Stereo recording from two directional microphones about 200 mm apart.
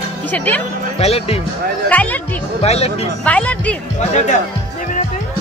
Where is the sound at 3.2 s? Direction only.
5° left (ahead or behind).